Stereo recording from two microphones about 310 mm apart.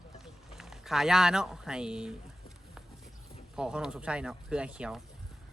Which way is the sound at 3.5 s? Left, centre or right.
Centre.